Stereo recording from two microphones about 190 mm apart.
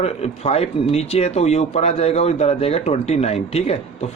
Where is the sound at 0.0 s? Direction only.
35° left (ahead or behind).